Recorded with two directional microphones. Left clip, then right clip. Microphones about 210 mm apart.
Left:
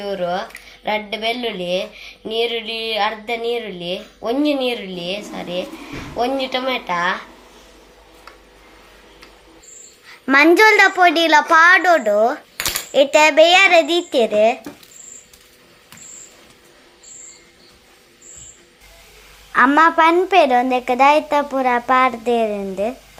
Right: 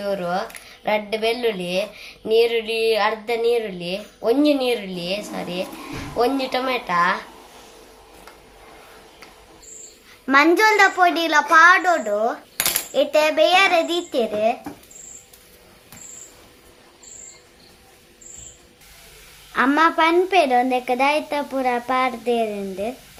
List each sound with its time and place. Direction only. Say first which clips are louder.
0.0 s speech: left 1 dB; 15° right (ahead or behind)
10.1 s a woman's voice: left 3 dB; 25° left (ahead or behind)
19.8 s a child's voice: left 4 dB; 15° left (ahead or behind)